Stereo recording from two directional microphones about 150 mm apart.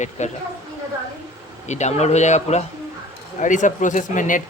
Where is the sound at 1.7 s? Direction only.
50° left (ahead or behind).